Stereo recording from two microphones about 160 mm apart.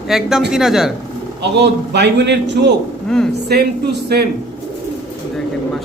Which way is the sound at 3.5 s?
75° right (ahead or behind).